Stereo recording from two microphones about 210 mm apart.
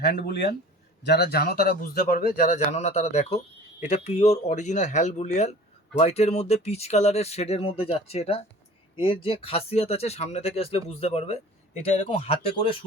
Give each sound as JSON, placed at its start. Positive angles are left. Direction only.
{"t": 0.0, "sound": "speech", "side_deg": 50}